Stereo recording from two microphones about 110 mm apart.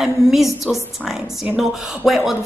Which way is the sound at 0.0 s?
5° right (ahead or behind).